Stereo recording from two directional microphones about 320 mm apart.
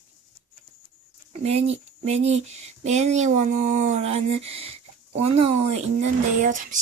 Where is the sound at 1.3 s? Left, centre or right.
Centre.